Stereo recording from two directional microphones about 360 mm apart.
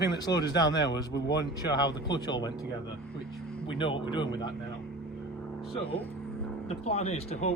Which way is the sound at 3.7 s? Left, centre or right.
Centre.